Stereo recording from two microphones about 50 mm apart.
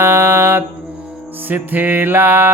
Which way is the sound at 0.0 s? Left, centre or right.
Right.